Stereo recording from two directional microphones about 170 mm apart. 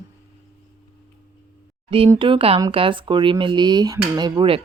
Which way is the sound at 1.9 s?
35° right (ahead or behind).